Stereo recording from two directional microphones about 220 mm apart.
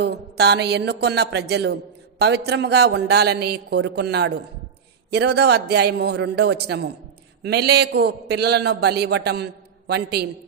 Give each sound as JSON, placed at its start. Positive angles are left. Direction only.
{"t": 0.0, "sound": "speech", "side_deg": -50}